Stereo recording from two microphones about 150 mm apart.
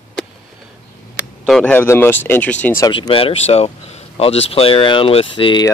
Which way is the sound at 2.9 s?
35° left (ahead or behind).